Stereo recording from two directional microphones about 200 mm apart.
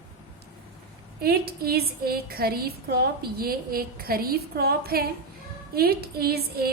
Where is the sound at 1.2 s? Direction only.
50° right (ahead or behind).